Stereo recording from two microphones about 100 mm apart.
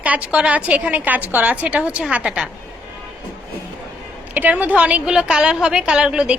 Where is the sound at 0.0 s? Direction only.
15° right (ahead or behind).